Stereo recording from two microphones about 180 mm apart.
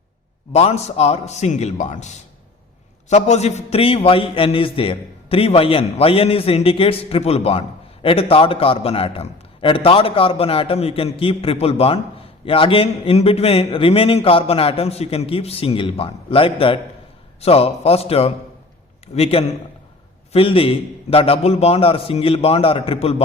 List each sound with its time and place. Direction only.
0.5 s a man's voice: 35° left (ahead or behind)